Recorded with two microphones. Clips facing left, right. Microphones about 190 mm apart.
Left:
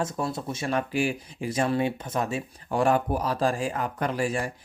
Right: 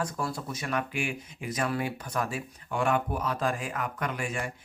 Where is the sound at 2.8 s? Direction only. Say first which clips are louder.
Left 4 dB; 35° left (ahead or behind).